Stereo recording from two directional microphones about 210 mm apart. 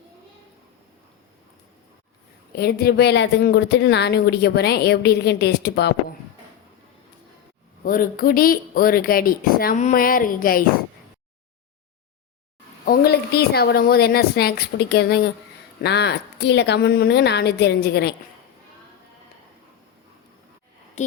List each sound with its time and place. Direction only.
2.6 s speech: 50° left (ahead or behind)
7.9 s speech: 40° left (ahead or behind)
12.8 s speech: 45° left (ahead or behind)